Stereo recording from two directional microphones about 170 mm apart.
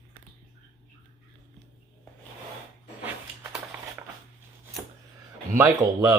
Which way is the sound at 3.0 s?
10° right (ahead or behind).